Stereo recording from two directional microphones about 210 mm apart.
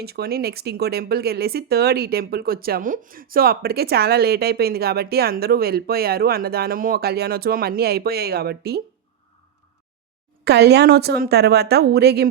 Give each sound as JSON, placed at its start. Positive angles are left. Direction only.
{"t": 0.0, "sound": "speech", "side_deg": -50}
{"t": 10.4, "sound": "speech", "side_deg": -50}